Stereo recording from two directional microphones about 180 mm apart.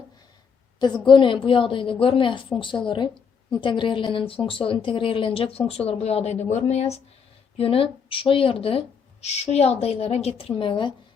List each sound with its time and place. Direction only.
1.0 s a woman's voice: 25° left (ahead or behind)